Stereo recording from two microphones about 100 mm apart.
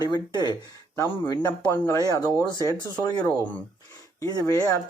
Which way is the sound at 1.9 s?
35° left (ahead or behind).